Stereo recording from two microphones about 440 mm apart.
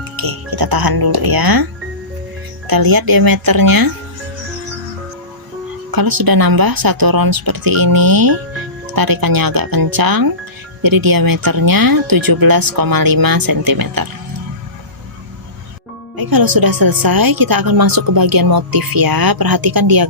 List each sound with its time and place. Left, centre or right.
0.2 s speech: right
2.6 s speech: right
5.9 s speech: right
16.1 s speech: right